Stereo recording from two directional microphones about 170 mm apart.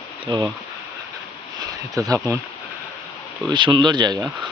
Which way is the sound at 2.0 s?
20° right (ahead or behind).